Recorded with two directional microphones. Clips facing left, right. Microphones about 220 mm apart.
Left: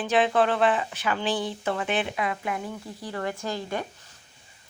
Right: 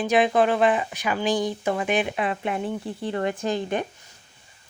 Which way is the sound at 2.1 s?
25° right (ahead or behind).